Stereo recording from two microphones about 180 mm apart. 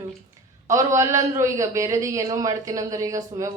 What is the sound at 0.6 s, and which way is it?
A man's voice, 15° right (ahead or behind).